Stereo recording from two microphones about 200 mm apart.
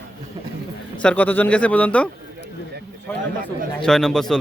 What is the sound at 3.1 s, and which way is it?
Chatter, 10° left (ahead or behind).